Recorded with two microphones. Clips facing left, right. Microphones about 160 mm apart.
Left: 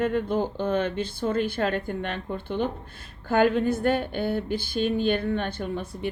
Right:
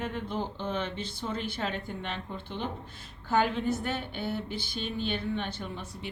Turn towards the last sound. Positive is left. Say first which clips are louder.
# left 7 dB
turn(degrees=50)  # may be behind; listen again after turning